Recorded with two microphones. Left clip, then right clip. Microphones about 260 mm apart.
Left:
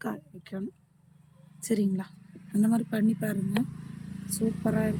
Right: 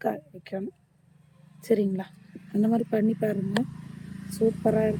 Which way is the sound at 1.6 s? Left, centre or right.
Centre.